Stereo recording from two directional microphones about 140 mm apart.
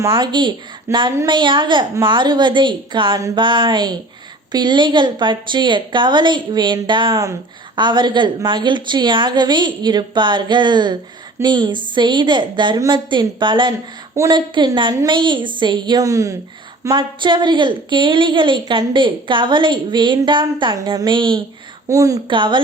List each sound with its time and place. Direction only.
0.0 s a woman's voice: 30° right (ahead or behind)
0.9 s a woman's voice: 20° right (ahead or behind)
1.3 s a woman's voice: 35° right (ahead or behind)
21.8 s a woman's voice: 25° right (ahead or behind)
22.3 s a woman's voice: 35° right (ahead or behind)